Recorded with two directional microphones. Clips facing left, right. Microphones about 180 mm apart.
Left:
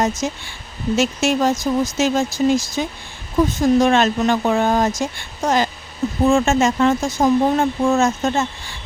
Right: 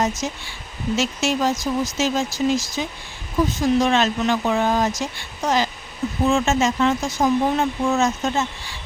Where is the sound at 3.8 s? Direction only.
50° left (ahead or behind).